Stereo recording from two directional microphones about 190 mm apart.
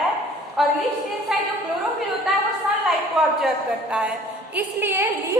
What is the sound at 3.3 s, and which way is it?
A woman's voice, 5° right (ahead or behind).